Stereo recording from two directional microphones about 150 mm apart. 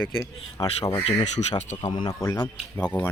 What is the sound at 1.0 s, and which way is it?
Speech, 50° left (ahead or behind).